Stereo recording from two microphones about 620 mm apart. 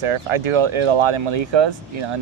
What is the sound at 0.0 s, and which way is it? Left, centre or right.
Speech, right.